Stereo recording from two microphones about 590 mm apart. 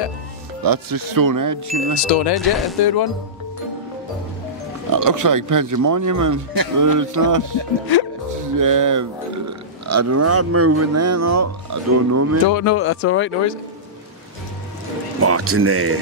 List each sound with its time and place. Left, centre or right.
0.7 s speech: right
2.3 s speech: centre
2.8 s music: left
4.9 s speech: right
12.4 s speech: left
15.2 s speech: right